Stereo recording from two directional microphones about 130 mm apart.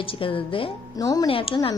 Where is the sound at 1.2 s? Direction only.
45° left (ahead or behind).